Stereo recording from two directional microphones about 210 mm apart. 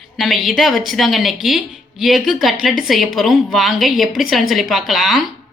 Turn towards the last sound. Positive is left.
turn(degrees=0)  # may be behind; listen again after turning